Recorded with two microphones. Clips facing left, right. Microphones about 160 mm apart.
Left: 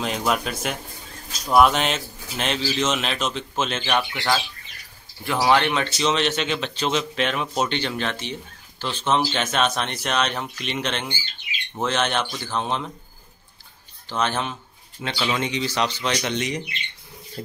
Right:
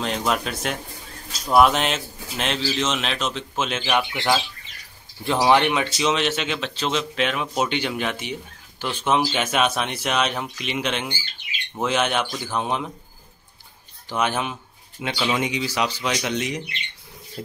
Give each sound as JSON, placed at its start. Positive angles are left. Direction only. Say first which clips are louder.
{"t": 0.0, "sound": "speech", "louder": "even", "side_deg": 5}
{"t": 5.9, "sound": "speech", "louder": "even", "side_deg": -5}
{"t": 14.0, "sound": "speech", "louder": "right 1 dB", "side_deg": -10}